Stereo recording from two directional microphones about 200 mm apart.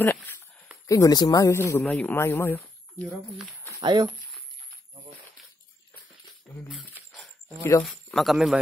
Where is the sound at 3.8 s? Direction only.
20° right (ahead or behind).